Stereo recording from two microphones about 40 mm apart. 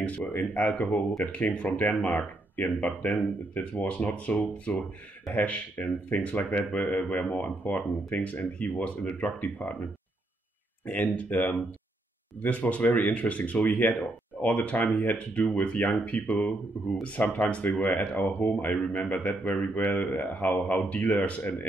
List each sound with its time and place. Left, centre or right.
0.4 s a man's voice: left
7.6 s a man's voice: left
10.9 s speech: left
13.6 s a man's voice: left
14.4 s a man's voice: left